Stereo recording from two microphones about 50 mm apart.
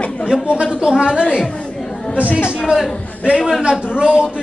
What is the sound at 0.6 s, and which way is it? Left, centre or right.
Speech, centre.